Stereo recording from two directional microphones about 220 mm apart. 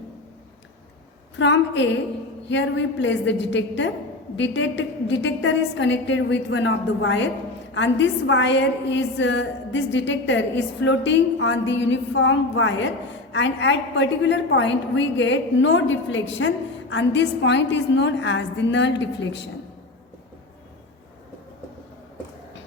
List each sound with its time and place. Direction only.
1.4 s a woman's voice: 55° left (ahead or behind)